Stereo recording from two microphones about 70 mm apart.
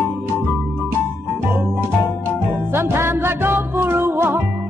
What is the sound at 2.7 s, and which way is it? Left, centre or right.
Music, right.